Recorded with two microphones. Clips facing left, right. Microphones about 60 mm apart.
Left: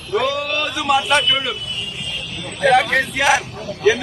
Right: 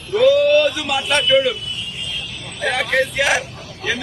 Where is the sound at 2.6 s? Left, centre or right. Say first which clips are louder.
Left 4 dB; centre.